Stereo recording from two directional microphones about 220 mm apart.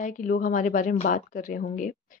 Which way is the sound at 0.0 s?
35° left (ahead or behind).